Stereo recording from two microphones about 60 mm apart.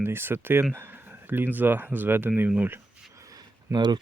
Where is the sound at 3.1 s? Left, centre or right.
Right.